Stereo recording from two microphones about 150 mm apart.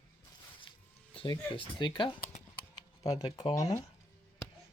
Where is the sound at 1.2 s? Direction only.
35° left (ahead or behind).